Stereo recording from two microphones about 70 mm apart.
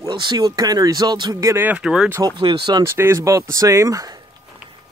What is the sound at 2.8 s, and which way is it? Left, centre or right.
Speech, right.